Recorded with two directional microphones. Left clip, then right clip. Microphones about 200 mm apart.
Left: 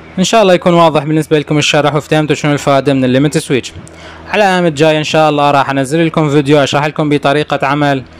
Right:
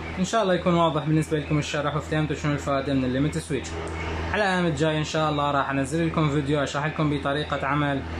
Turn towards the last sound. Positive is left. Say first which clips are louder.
# left 13 dB
turn(degrees=40)  # may be behind; listen again after turning